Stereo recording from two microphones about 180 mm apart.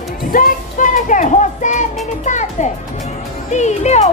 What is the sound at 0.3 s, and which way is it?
Child singing, 50° left (ahead or behind).